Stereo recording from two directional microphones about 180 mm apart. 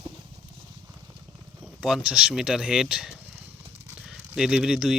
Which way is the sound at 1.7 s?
5° right (ahead or behind).